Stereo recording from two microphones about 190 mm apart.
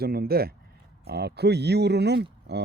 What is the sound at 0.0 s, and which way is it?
Speech, 55° right (ahead or behind).